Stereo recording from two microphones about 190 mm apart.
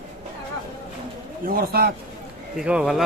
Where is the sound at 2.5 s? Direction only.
5° right (ahead or behind).